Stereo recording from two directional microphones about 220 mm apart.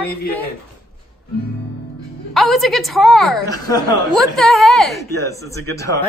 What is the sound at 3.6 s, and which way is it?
Speech, 15° left (ahead or behind).